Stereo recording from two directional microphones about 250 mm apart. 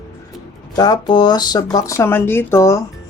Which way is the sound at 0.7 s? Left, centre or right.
Centre.